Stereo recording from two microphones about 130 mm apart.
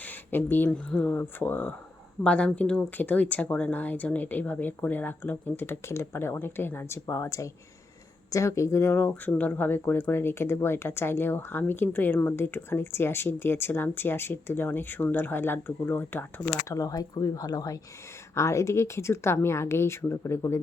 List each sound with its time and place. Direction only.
0.0 s a woman's voice: 15° left (ahead or behind)